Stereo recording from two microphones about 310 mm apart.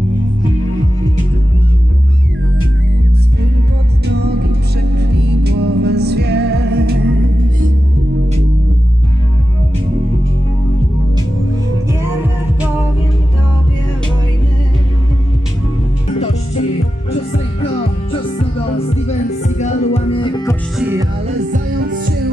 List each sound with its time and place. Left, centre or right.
4.1 s music: right
19.0 s music: left
20.8 s music: centre
21.5 s music: right